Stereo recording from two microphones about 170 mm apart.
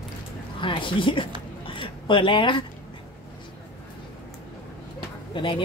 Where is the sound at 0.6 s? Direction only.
30° left (ahead or behind).